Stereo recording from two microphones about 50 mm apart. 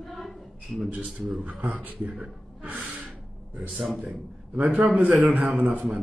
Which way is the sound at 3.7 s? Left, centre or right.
Centre.